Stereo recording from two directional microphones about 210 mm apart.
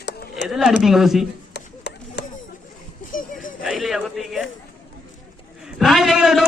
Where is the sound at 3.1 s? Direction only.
40° left (ahead or behind).